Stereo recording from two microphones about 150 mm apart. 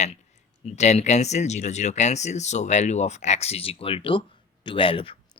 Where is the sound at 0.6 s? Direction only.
45° left (ahead or behind).